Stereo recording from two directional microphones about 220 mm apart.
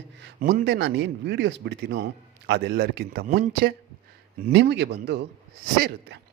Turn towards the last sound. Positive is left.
turn(degrees=-45)  # may be behind; listen again after turning